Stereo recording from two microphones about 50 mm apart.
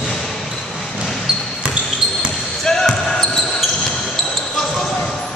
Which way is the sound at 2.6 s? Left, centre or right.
Centre.